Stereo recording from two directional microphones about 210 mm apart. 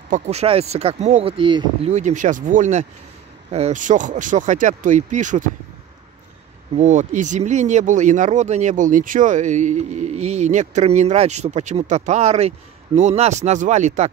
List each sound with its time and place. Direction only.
0.1 s speech: 30° right (ahead or behind)
1.9 s speech: 35° right (ahead or behind)
6.8 s speech: 35° right (ahead or behind)